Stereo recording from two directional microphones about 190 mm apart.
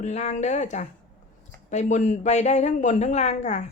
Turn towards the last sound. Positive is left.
turn(degrees=35)  # may be behind; listen again after turning